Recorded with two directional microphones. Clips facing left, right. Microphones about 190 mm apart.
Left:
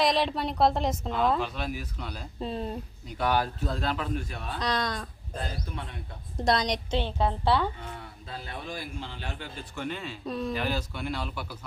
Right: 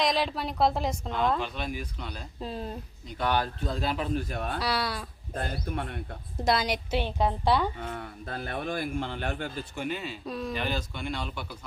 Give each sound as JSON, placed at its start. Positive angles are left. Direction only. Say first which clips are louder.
{"t": 0.0, "sound": "a woman's voice", "louder": "left 2 dB", "side_deg": 0}
{"t": 3.9, "sound": "a man's voice", "louder": "right 2 dB", "side_deg": -20}
{"t": 4.2, "sound": "speech", "louder": "right 4 dB", "side_deg": -45}
{"t": 4.6, "sound": "a woman's voice", "louder": "left 4 dB", "side_deg": -10}
{"t": 5.3, "sound": "speech", "louder": "right 4 dB", "side_deg": -60}
{"t": 6.4, "sound": "a woman's voice", "louder": "left 1 dB", "side_deg": -5}
{"t": 7.8, "sound": "speech", "louder": "right 5 dB", "side_deg": -50}
{"t": 9.7, "sound": "a woman's voice", "louder": "left 2 dB", "side_deg": -10}